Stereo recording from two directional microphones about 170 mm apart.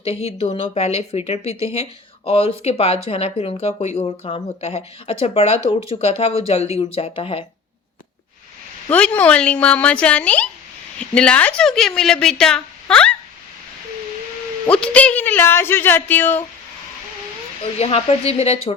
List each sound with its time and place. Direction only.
0.0 s speech: 35° left (ahead or behind)
8.9 s a woman's voice: 10° left (ahead or behind)
14.7 s speech: 5° left (ahead or behind)
17.6 s speech: 35° left (ahead or behind)